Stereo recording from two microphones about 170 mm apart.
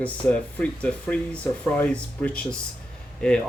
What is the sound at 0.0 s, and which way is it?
Speech, 10° left (ahead or behind).